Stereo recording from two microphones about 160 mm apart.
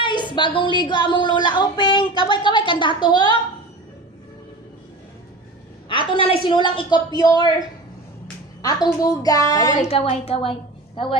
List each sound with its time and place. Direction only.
0.0 s a woman's voice: 30° left (ahead or behind)
5.9 s a woman's voice: 30° left (ahead or behind)
8.8 s a woman's voice: 25° left (ahead or behind)
9.8 s a woman's voice: 40° left (ahead or behind)